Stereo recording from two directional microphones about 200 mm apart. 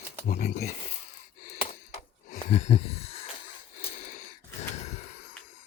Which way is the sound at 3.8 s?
40° left (ahead or behind).